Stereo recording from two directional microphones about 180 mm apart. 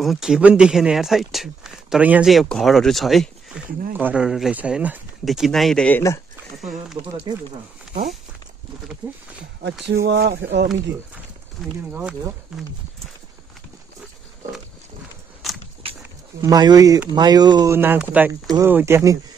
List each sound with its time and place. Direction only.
0.0 s speech: centre (ahead or behind)
6.6 s speech: centre (ahead or behind)
7.1 s speech: 25° right (ahead or behind)
10.0 s speech: 60° right (ahead or behind)
11.9 s speech: 5° right (ahead or behind)
16.3 s speech: 20° right (ahead or behind)